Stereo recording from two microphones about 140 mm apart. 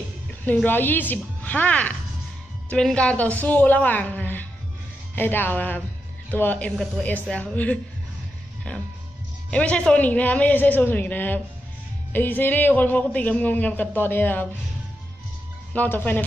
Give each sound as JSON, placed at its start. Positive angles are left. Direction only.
{"t": 0.7, "sound": "a man's voice", "side_deg": 15}
{"t": 8.7, "sound": "music", "side_deg": 10}
{"t": 9.5, "sound": "a man's voice", "side_deg": 10}
{"t": 15.7, "sound": "a man's voice", "side_deg": 10}